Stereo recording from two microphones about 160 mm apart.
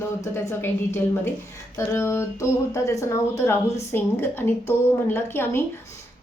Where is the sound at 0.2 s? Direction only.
15° left (ahead or behind).